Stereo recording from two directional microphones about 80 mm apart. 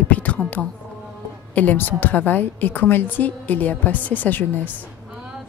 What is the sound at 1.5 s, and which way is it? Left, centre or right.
A woman's voice, left.